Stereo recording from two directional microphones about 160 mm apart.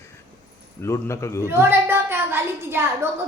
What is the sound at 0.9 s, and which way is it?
Speech, 20° left (ahead or behind).